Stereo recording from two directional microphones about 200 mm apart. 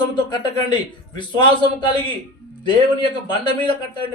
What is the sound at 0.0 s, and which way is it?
A man's voice, 20° left (ahead or behind).